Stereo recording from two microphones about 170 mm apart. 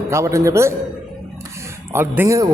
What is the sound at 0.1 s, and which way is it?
Speech, 15° right (ahead or behind).